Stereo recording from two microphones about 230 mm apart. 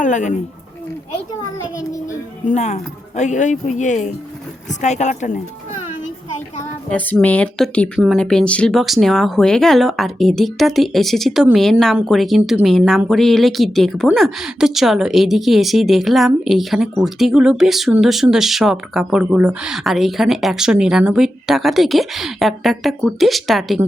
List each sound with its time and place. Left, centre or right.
0.0 s a woman's voice: left
2.5 s speech: left
6.9 s a woman's voice: centre